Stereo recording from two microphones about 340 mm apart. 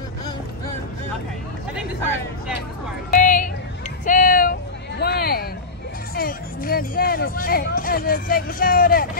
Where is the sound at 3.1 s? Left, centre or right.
Left.